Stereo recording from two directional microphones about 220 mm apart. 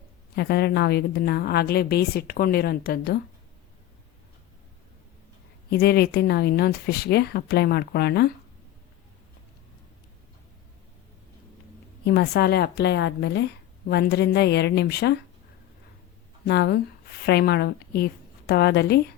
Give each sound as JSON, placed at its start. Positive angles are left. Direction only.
{"t": 0.3, "sound": "a woman's voice", "side_deg": 50}
{"t": 5.7, "sound": "a woman's voice", "side_deg": 45}
{"t": 12.0, "sound": "a woman's voice", "side_deg": 45}
{"t": 16.5, "sound": "a woman's voice", "side_deg": 50}